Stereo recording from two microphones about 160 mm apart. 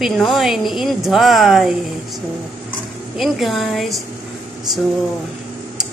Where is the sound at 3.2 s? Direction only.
Centre (ahead or behind).